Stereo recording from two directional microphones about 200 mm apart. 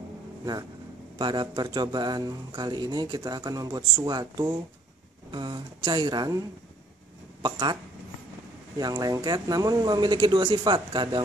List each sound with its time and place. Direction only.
1.1 s speech: 20° right (ahead or behind)
7.4 s speech: 20° right (ahead or behind)
8.7 s speech: 20° right (ahead or behind)